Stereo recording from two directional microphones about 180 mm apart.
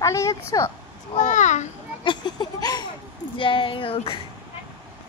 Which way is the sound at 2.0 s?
25° left (ahead or behind).